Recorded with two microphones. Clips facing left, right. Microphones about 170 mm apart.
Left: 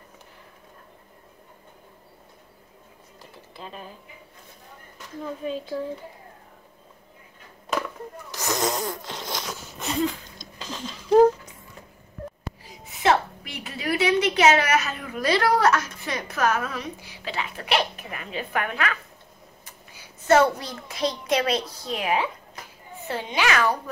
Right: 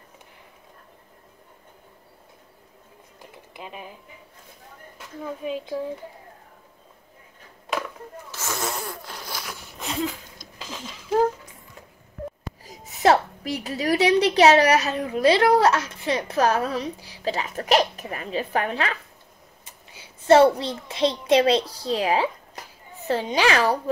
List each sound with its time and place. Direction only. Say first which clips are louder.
3.2 s a sound: right 1 dB; 15° right (ahead or behind)
5.2 s speech: even; 10° right (ahead or behind)
8.3 s speech: left 4 dB; 15° left (ahead or behind)
9.1 s zipper: left 3 dB; 20° left (ahead or behind)
9.8 s a sound: left 2 dB; centre (ahead or behind)
12.6 s a woman's voice: right 3 dB; 40° right (ahead or behind)